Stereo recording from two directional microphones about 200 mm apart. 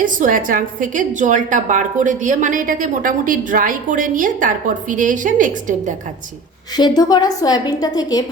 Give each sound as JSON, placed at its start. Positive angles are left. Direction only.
{"t": 0.0, "sound": "a woman's voice", "side_deg": -40}
{"t": 6.7, "sound": "a woman's voice", "side_deg": 20}